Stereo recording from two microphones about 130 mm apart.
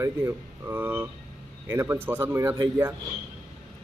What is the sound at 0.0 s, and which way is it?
Speech, 20° right (ahead or behind).